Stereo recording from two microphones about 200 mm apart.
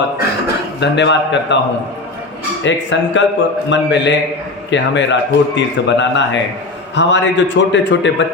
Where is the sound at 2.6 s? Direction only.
65° left (ahead or behind).